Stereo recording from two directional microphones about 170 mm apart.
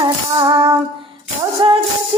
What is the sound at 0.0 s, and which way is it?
Music, 25° right (ahead or behind).